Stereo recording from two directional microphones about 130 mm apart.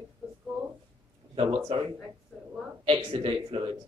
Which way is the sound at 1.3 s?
40° right (ahead or behind).